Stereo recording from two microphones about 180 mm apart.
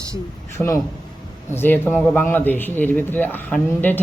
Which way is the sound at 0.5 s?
15° left (ahead or behind).